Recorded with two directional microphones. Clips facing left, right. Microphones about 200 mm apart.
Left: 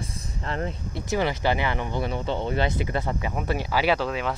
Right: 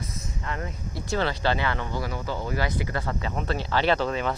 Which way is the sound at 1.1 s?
15° left (ahead or behind).